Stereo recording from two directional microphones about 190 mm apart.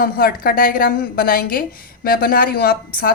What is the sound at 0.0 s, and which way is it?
A woman's voice, 50° left (ahead or behind).